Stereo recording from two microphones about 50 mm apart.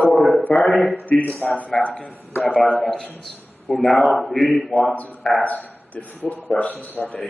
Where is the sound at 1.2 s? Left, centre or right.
Left.